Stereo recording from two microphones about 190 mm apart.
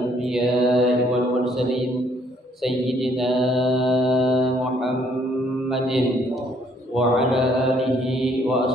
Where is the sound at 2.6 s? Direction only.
Centre (ahead or behind).